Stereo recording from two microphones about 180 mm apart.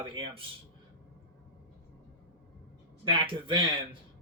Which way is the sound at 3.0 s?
30° right (ahead or behind).